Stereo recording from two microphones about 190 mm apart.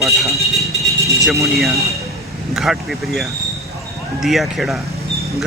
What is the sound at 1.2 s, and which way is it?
Speech, centre (ahead or behind).